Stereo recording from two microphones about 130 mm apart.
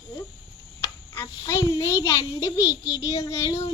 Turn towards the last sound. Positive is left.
turn(degrees=25)  # may be behind; listen again after turning